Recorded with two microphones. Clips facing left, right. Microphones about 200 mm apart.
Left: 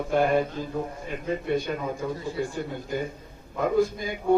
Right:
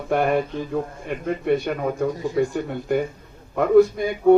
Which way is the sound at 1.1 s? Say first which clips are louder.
Right 5 dB; 65° right (ahead or behind).